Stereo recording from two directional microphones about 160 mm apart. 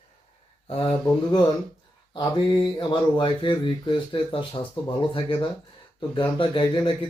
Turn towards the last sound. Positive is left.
turn(degrees=30)  # may be behind; listen again after turning